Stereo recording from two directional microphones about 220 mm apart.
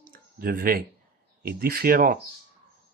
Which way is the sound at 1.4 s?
40° right (ahead or behind).